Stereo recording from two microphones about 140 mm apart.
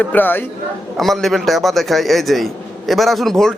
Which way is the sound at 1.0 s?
Centre (ahead or behind).